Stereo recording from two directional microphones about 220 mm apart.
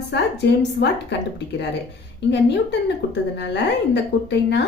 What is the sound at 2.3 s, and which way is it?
Speech, 50° left (ahead or behind).